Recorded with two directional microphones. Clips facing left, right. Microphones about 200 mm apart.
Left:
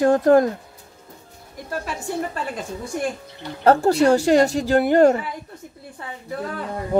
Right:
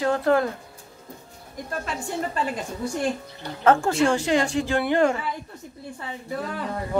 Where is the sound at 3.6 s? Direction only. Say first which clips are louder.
Left 4 dB; 35° left (ahead or behind).